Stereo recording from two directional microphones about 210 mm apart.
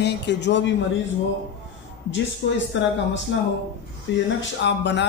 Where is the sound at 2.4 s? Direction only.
60° left (ahead or behind).